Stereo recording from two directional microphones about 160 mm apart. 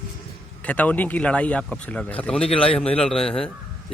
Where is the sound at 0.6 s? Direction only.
10° left (ahead or behind).